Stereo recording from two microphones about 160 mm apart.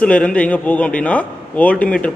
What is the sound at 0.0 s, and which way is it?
A man's voice, 5° left (ahead or behind).